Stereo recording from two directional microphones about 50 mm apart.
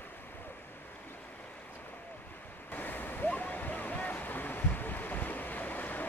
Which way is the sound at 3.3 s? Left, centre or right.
Left.